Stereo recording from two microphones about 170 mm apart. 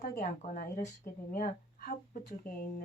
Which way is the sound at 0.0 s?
50° left (ahead or behind).